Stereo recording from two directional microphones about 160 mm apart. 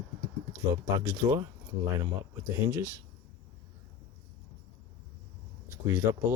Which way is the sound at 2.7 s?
15° right (ahead or behind).